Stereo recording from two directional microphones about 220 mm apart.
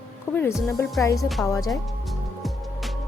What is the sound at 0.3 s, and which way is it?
Speech, 10° left (ahead or behind).